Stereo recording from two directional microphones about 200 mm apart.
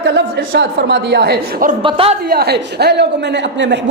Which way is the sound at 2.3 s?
50° right (ahead or behind).